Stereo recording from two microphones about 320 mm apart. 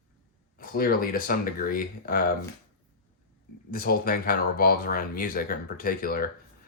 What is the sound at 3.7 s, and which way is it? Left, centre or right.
Speech, left.